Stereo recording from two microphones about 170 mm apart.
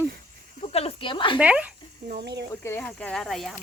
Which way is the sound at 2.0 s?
75° right (ahead or behind).